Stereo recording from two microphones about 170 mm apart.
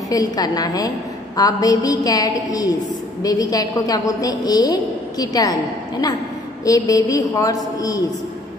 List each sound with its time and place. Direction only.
0.1 s a woman's voice: 20° left (ahead or behind)